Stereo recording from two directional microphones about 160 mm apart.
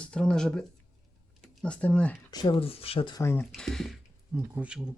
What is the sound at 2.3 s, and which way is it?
Speech, 30° left (ahead or behind).